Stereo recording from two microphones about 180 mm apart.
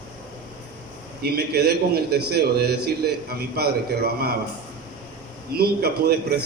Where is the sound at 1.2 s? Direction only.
60° right (ahead or behind).